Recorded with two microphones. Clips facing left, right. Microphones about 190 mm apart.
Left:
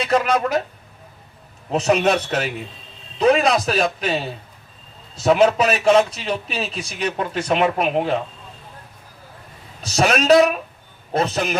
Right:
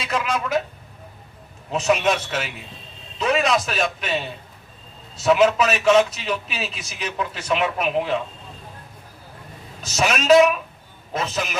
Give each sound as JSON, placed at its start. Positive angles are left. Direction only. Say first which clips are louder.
{"t": 0.0, "sound": "speech", "louder": "left 6 dB", "side_deg": 45}
{"t": 1.7, "sound": "a man's voice", "louder": "left 3 dB", "side_deg": 35}
{"t": 9.8, "sound": "a man's voice", "louder": "left 3 dB", "side_deg": 35}